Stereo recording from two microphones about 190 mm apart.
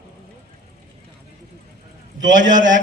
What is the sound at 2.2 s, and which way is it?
Speech, 80° right.